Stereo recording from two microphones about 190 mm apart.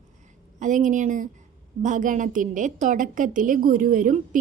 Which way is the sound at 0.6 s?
40° right (ahead or behind).